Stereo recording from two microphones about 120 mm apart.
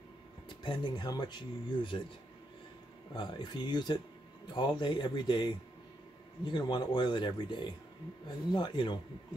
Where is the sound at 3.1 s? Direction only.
40° left (ahead or behind).